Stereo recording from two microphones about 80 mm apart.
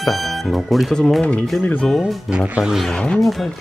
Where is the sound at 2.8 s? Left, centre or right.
Centre.